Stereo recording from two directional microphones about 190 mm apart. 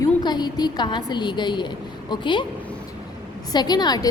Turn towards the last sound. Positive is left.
turn(degrees=20)  # may be behind; listen again after turning